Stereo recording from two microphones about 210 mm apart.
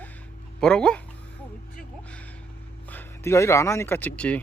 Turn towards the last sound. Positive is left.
turn(degrees=5)  # may be behind; listen again after turning